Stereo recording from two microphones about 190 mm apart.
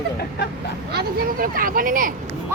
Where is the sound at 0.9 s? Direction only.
50° right (ahead or behind).